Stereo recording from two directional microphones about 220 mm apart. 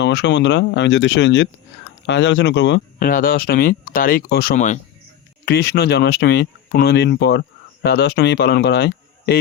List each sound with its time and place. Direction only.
0.0 s speech: 55° left (ahead or behind)
3.0 s speech: 40° left (ahead or behind)
5.5 s speech: 45° left (ahead or behind)